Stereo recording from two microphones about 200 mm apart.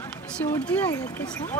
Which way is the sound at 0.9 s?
20° left (ahead or behind).